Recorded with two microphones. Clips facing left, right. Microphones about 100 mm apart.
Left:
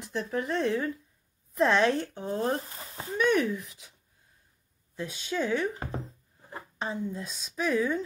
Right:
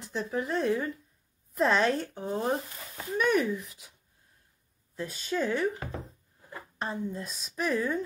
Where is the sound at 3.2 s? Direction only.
Centre (ahead or behind).